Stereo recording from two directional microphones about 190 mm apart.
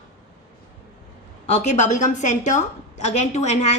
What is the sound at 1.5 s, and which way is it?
A woman's voice, 35° left (ahead or behind).